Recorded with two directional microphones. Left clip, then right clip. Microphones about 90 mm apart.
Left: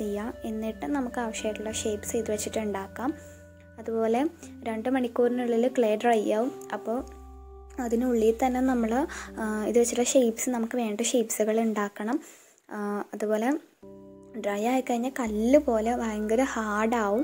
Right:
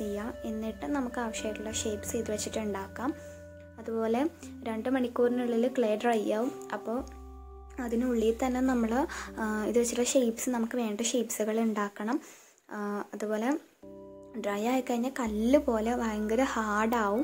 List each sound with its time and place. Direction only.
0.0 s a sound: 40° left (ahead or behind)
1.1 s speech: 25° left (ahead or behind)
3.8 s speech: 25° left (ahead or behind)
7.8 s speech: 30° left (ahead or behind)
14.4 s a woman's voice: 20° left (ahead or behind)